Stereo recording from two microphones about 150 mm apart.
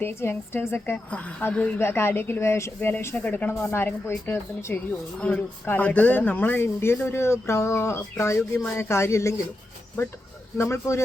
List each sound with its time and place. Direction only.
0.0 s a woman's voice: 15° left (ahead or behind)
10.6 s speech: 20° left (ahead or behind)